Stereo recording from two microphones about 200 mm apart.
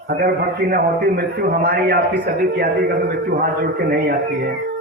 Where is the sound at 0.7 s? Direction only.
50° right (ahead or behind).